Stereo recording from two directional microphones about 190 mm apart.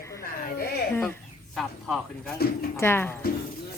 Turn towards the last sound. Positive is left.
turn(degrees=10)  # may be behind; listen again after turning